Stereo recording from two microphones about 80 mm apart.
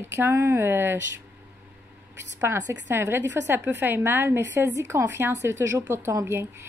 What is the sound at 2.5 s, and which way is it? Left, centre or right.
A woman's voice, right.